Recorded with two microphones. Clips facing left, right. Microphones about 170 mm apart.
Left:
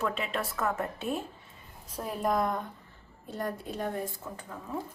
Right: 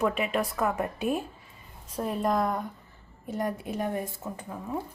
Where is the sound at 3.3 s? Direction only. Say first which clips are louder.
Right 4 dB; 20° right (ahead or behind).